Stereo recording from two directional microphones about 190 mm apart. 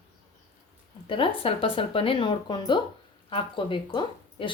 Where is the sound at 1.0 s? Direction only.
25° left (ahead or behind).